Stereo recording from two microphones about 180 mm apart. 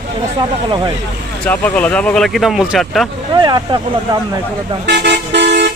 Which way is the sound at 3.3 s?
20° right (ahead or behind).